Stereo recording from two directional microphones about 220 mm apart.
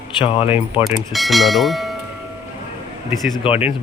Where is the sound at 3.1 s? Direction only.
Centre (ahead or behind).